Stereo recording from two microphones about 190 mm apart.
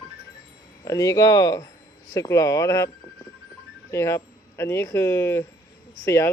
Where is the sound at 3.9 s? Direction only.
15° left (ahead or behind).